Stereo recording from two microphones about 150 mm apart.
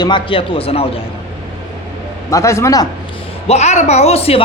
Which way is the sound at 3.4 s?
45° left (ahead or behind).